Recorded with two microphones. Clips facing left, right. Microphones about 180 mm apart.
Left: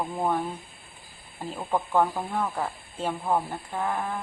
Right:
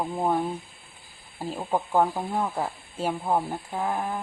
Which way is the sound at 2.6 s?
10° right (ahead or behind).